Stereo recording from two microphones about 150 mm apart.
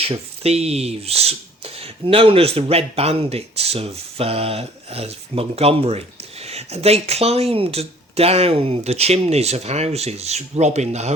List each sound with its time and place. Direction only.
0.0 s speech: 40° right (ahead or behind)